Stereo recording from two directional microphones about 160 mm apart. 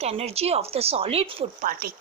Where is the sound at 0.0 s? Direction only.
40° right (ahead or behind).